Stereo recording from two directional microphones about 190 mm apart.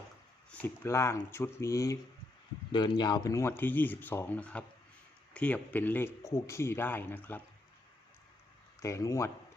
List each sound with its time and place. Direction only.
0.5 s speech: 10° left (ahead or behind)
8.8 s speech: 15° left (ahead or behind)